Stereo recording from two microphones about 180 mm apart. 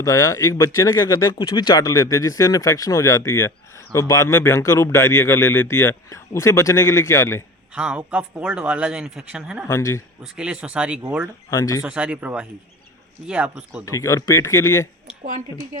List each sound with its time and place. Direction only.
0.0 s speech: 15° left (ahead or behind)
7.8 s speech: 5° right (ahead or behind)
9.6 s speech: 15° left (ahead or behind)
10.3 s speech: 5° right (ahead or behind)
11.5 s speech: 20° left (ahead or behind)
11.8 s speech: 5° right (ahead or behind)
13.8 s speech: 15° left (ahead or behind)
15.2 s speech: 45° right (ahead or behind)